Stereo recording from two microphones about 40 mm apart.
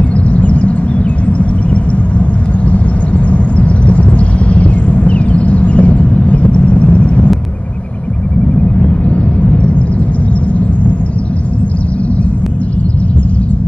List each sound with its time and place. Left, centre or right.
0.3 s a sound: left
3.3 s vehicle: left
8.7 s vehicle: left